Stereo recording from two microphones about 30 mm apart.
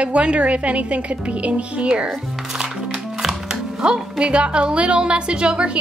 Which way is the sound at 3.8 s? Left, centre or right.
Right.